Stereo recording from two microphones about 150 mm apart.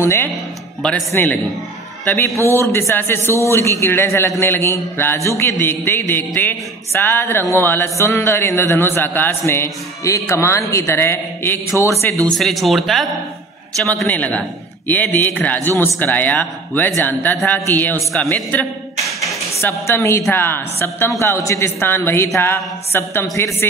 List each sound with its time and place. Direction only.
0.0 s speech: 20° left (ahead or behind)
12.3 s speech: centre (ahead or behind)